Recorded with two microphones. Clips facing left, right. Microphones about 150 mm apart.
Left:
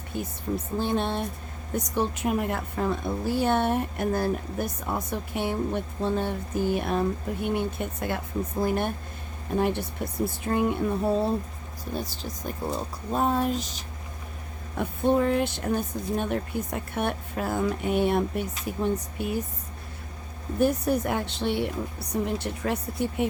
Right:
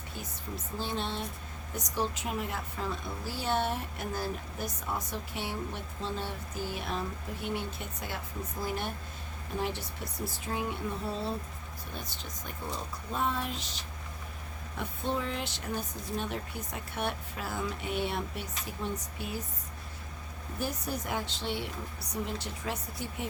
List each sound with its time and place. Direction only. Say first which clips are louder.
0.2 s a woman's voice: left 12 dB; 55° left (ahead or behind)
11.9 s speech: left 10 dB; 35° left (ahead or behind); by 19.4 s 55° left (ahead or behind)
20.6 s a woman's voice: left 12 dB; 55° left (ahead or behind)